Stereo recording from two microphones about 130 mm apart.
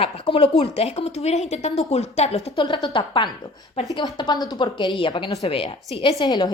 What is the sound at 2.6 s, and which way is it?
A woman's voice, 35° left (ahead or behind).